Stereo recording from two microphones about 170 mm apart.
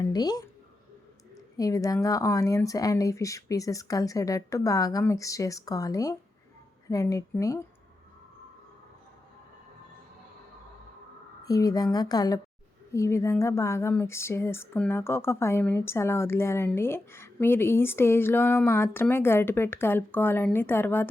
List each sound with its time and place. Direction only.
0.0 s a woman's voice: 25° left (ahead or behind)
1.5 s speech: 20° left (ahead or behind)
11.4 s speech: 20° left (ahead or behind)